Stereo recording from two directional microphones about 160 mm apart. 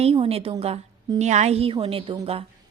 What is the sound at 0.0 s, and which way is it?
A woman's voice, 35° right (ahead or behind).